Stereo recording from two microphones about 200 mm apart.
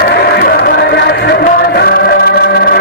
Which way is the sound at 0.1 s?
55° left (ahead or behind).